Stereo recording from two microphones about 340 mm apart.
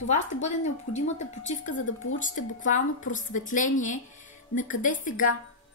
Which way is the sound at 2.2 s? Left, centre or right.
Left.